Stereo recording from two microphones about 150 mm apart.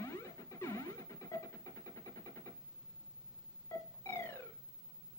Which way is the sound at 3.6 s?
15° left (ahead or behind).